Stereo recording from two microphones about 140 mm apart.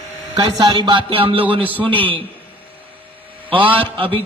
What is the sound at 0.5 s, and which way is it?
Music, 30° right (ahead or behind).